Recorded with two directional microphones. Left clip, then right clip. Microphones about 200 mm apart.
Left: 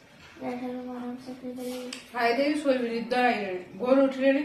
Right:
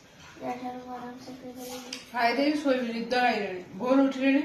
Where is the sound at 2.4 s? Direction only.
20° left (ahead or behind).